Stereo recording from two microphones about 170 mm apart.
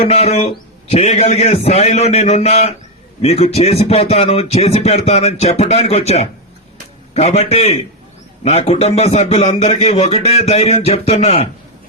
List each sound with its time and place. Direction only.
0.0 s speech: 40° left (ahead or behind)